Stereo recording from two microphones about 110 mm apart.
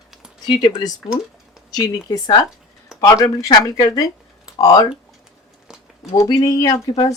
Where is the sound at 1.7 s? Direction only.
35° left (ahead or behind).